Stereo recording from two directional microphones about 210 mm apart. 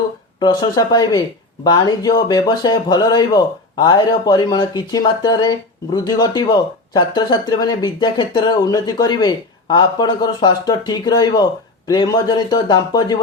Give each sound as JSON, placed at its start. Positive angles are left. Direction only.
{"t": 0.3, "sound": "speech", "side_deg": 20}